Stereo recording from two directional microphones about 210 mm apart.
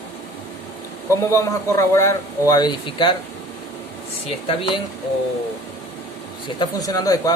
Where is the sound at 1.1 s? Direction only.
15° left (ahead or behind).